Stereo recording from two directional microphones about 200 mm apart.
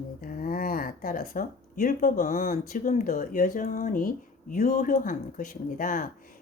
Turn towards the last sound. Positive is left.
turn(degrees=45)  # may be behind; listen again after turning